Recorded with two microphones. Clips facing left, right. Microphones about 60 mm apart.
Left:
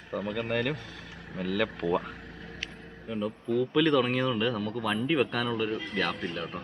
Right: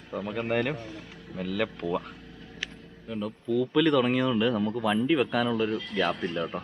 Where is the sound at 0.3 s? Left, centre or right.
Centre.